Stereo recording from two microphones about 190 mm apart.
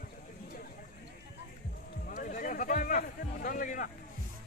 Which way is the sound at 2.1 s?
45° left (ahead or behind).